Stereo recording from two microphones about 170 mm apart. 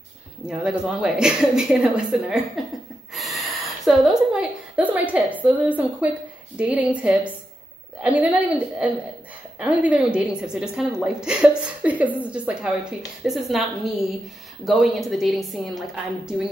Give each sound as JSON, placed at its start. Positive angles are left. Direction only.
{"t": 0.5, "sound": "a woman's voice", "side_deg": -5}
{"t": 3.1, "sound": "a sound", "side_deg": 0}
{"t": 8.0, "sound": "a woman's voice", "side_deg": -10}